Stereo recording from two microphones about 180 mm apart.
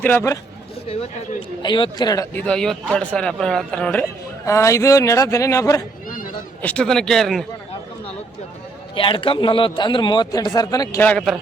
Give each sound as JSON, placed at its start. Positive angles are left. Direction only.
{"t": 0.0, "sound": "a man's voice", "side_deg": 10}
{"t": 1.6, "sound": "a man's voice", "side_deg": 25}
{"t": 2.3, "sound": "a man's voice", "side_deg": 5}
{"t": 4.4, "sound": "a man's voice", "side_deg": 15}
{"t": 9.0, "sound": "a man's voice", "side_deg": 30}
{"t": 11.0, "sound": "a man's voice", "side_deg": 5}